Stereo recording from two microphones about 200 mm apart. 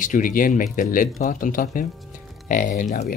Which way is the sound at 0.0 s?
40° left (ahead or behind).